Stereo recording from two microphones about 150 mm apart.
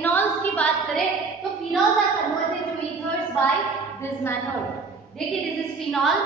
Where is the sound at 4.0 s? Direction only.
15° left (ahead or behind).